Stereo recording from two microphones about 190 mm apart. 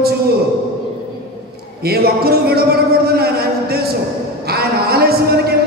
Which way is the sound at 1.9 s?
55° right (ahead or behind).